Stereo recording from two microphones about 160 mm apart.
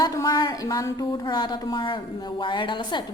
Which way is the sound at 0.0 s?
20° left (ahead or behind).